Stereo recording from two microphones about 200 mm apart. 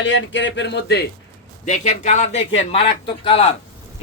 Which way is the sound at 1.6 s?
40° left (ahead or behind).